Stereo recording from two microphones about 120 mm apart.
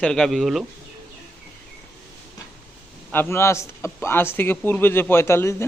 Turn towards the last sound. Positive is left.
turn(degrees=20)  # may be behind; listen again after turning